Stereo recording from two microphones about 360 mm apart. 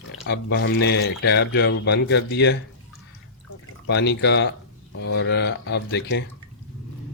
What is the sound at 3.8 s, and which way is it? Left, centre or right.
Speech, left.